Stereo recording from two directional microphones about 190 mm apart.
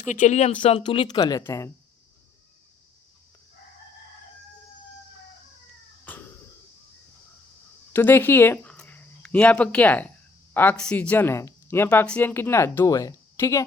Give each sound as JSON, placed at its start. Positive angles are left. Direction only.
{"t": 0.0, "sound": "speech", "side_deg": 40}
{"t": 7.9, "sound": "speech", "side_deg": 10}